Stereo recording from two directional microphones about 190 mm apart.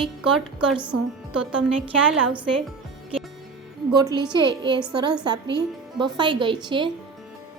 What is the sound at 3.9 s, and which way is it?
Speech, 20° right (ahead or behind).